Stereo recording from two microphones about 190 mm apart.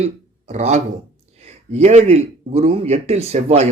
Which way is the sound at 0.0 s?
35° right (ahead or behind).